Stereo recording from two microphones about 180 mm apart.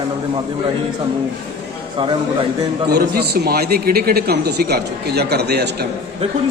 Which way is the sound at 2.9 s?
60° right (ahead or behind).